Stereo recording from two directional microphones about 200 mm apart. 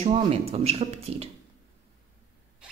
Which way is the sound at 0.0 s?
30° right (ahead or behind).